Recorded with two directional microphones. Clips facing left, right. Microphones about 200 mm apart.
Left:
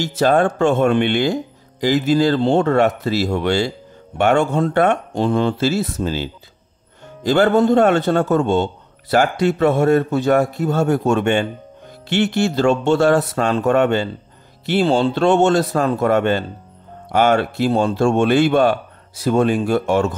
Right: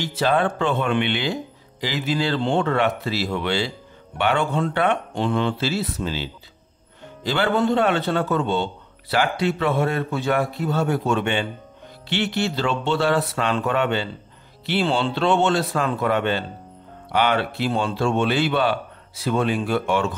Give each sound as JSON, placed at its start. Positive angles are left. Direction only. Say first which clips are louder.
{"t": 0.0, "sound": "speech", "louder": "left 5 dB", "side_deg": 45}